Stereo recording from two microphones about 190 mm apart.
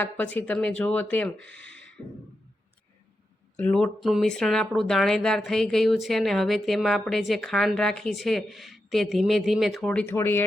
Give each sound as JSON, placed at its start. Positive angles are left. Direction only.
{"t": 0.0, "sound": "speech", "side_deg": 10}
{"t": 3.6, "sound": "speech", "side_deg": 5}